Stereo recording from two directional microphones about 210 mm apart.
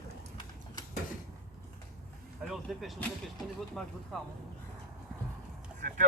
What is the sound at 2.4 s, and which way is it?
Speech, centre (ahead or behind).